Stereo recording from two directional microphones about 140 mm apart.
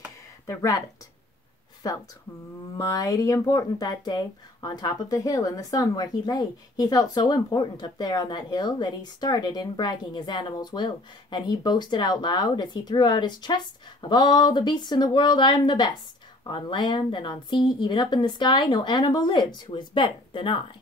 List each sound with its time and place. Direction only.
0.5 s speech: 25° left (ahead or behind)
1.8 s speech: 25° left (ahead or behind)